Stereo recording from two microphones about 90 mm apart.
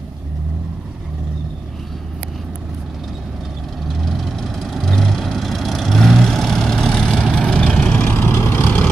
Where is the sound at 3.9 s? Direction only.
Centre (ahead or behind).